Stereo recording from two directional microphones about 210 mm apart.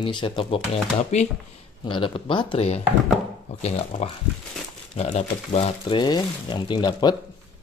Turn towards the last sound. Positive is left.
turn(degrees=20)  # may be behind; listen again after turning